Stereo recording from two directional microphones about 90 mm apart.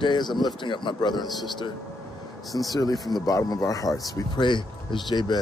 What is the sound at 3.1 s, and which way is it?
Speech, 45° left (ahead or behind).